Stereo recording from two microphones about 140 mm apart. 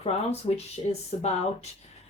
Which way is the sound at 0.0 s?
45° left (ahead or behind).